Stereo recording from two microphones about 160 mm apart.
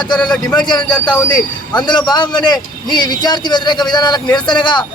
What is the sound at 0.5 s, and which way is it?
A man's voice, 30° left (ahead or behind).